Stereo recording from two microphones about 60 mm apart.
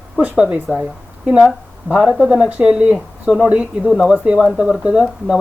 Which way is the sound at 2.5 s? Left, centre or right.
Right.